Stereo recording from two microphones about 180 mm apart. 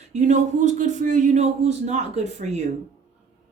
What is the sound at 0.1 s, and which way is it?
A woman's voice, 40° right (ahead or behind).